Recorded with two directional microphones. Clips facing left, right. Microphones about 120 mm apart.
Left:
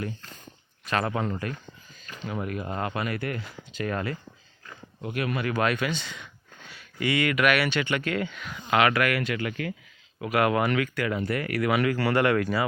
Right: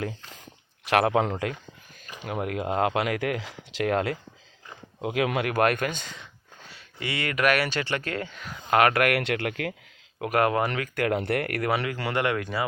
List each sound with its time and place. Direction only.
0.9 s speech: 75° right (ahead or behind); by 5.5 s 90° right
5.5 s speech: 55° right (ahead or behind)
6.7 s speech: 30° right (ahead or behind); by 9.7 s 70° right (ahead or behind)
10.3 s speech: 35° right (ahead or behind)
10.9 s speech: 60° right (ahead or behind)
11.6 s speech: 35° right (ahead or behind)
11.9 s speech: 20° right (ahead or behind)